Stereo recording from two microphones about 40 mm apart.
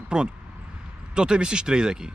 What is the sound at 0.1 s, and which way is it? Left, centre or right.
Speech, right.